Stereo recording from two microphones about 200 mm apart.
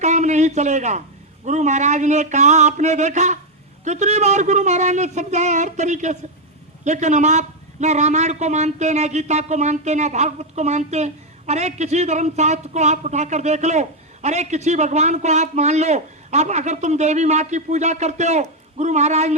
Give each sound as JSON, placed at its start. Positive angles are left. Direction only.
{"t": 0.0, "sound": "a man's voice", "side_deg": -35}